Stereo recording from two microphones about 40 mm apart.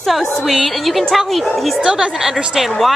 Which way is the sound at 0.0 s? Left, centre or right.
Centre.